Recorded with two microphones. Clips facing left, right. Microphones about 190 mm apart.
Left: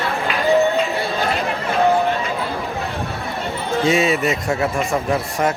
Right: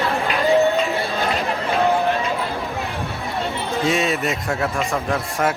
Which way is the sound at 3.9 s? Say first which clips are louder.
Left 4 dB; centre (ahead or behind).